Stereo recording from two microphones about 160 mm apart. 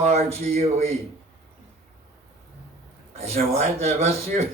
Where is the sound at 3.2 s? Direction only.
40° right (ahead or behind).